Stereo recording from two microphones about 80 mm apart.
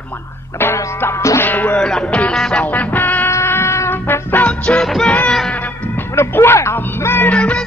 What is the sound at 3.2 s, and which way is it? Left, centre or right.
Music, left.